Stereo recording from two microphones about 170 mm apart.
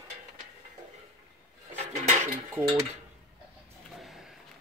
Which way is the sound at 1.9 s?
45° right (ahead or behind).